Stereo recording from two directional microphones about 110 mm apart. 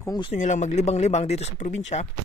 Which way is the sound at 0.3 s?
90° left.